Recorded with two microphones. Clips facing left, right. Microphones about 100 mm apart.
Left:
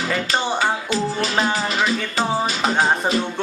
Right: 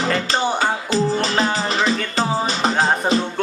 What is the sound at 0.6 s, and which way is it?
Music, 35° right (ahead or behind).